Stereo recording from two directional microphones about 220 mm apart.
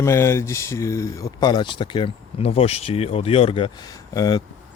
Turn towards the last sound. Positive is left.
turn(degrees=20)  # may be behind; listen again after turning